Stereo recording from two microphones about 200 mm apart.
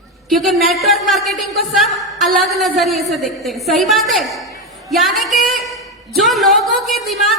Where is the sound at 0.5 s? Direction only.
Centre (ahead or behind).